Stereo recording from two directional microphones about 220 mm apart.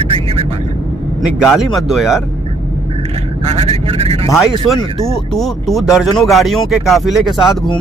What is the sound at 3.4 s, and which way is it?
Speech, 25° right (ahead or behind).